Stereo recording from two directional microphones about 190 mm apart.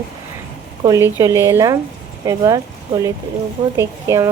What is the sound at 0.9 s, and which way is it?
Speech, 15° right (ahead or behind).